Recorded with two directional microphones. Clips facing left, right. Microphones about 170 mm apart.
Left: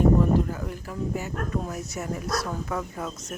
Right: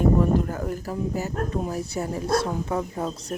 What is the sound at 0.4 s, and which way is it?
Speech, 45° right (ahead or behind).